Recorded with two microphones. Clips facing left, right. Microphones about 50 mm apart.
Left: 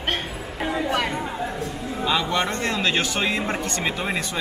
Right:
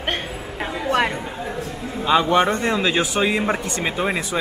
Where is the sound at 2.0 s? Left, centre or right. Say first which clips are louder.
Right 7 dB; right.